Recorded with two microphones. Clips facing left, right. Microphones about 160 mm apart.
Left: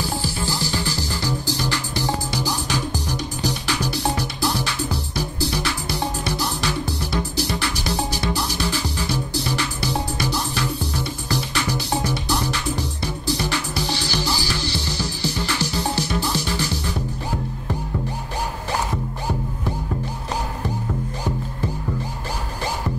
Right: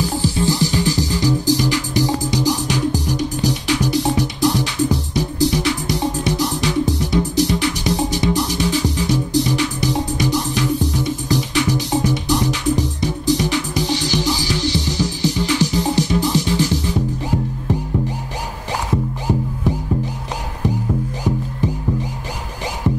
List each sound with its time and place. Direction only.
0.2 s music: 20° right (ahead or behind)
3.8 s music: 20° right (ahead or behind)